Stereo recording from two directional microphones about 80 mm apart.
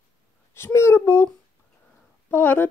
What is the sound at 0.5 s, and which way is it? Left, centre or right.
Speech, left.